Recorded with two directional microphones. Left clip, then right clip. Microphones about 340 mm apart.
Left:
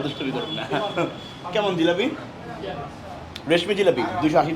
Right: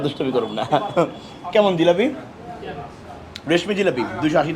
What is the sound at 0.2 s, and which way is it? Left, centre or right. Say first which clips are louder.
A man's voice: right 6 dB; right.